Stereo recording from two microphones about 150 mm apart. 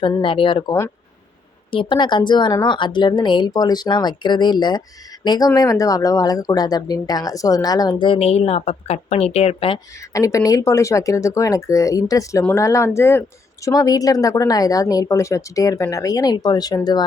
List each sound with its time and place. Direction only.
0.2 s speech: 35° left (ahead or behind)
1.7 s speech: 35° left (ahead or behind)
10.1 s speech: 20° left (ahead or behind)